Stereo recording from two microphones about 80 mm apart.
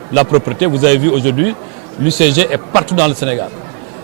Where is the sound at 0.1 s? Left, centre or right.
Centre.